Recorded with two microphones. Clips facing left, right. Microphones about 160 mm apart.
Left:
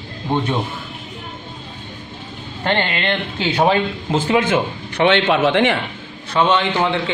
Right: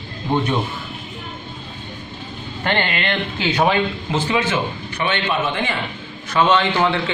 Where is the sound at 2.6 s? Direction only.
25° left (ahead or behind).